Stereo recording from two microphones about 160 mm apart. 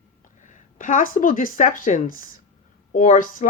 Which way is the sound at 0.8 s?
55° left (ahead or behind).